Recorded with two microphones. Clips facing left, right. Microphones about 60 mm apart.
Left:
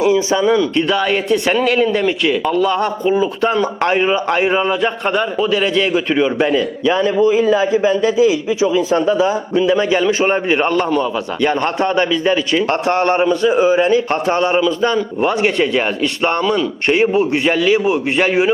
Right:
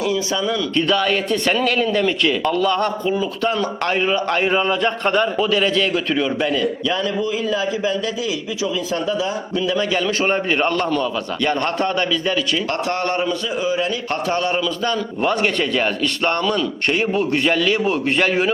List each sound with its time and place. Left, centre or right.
0.0 s a man's voice: left
0.8 s a man's voice: centre